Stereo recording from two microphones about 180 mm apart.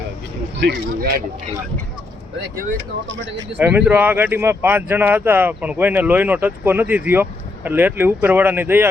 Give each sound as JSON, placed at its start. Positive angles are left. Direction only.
{"t": 0.6, "sound": "speech", "side_deg": -65}
{"t": 3.6, "sound": "speech", "side_deg": -5}